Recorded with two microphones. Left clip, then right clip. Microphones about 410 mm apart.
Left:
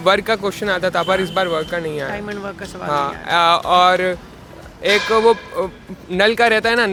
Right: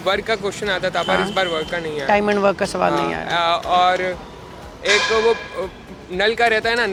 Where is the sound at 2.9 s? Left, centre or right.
Left.